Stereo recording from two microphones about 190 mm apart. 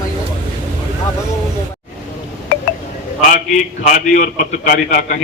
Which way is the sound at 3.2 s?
45° left (ahead or behind).